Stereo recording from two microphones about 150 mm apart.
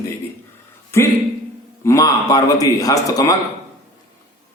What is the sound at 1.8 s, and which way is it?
A man's voice, 20° left (ahead or behind).